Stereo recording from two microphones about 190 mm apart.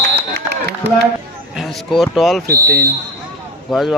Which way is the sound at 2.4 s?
50° right (ahead or behind).